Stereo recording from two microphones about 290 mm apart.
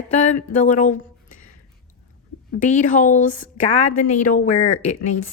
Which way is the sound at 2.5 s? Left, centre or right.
Left.